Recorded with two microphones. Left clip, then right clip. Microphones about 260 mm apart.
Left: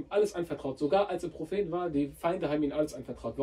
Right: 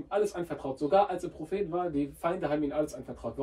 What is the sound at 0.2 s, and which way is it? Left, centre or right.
Speech, centre.